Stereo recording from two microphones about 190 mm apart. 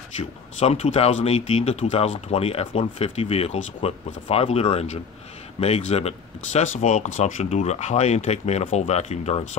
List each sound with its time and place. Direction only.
0.6 s speech: 35° left (ahead or behind)